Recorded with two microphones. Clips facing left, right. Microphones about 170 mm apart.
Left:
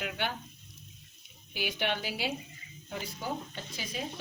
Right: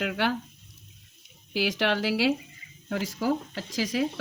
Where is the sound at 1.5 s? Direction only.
90° right.